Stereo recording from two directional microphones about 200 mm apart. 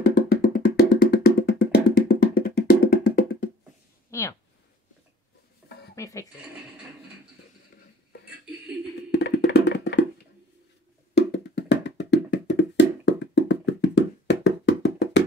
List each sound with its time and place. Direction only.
0.0 s music: 55° left (ahead or behind)
4.1 s a sound: 15° left (ahead or behind)
5.9 s speech: 15° left (ahead or behind)
9.1 s music: 55° left (ahead or behind)
11.1 s music: 60° left (ahead or behind)